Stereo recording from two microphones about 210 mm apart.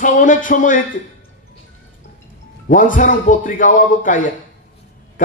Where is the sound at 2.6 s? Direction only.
40° left (ahead or behind).